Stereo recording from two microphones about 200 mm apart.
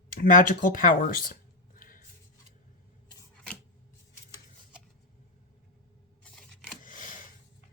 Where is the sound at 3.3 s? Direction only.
5° left (ahead or behind).